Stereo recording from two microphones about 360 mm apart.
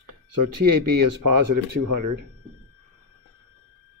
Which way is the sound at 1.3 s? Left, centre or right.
Right.